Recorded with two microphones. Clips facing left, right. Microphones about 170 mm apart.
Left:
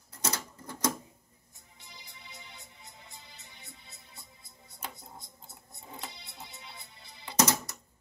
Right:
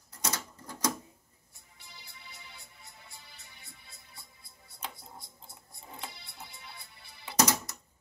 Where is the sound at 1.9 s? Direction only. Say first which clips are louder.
Left 1 dB; 20° left (ahead or behind).